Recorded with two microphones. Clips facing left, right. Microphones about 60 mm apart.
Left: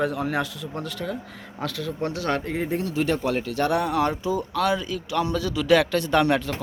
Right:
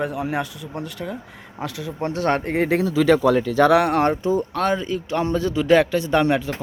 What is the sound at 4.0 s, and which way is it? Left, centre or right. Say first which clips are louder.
A man's voice: right 4 dB; right.